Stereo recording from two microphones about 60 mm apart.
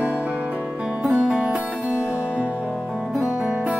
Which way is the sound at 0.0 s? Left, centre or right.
Right.